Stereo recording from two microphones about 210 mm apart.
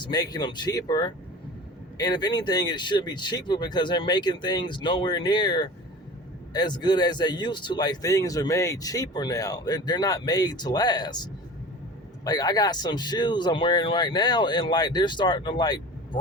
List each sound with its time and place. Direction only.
0.0 s a man's voice: 20° left (ahead or behind)